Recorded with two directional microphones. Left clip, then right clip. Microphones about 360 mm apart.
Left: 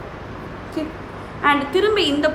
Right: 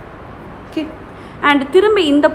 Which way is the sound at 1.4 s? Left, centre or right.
Centre.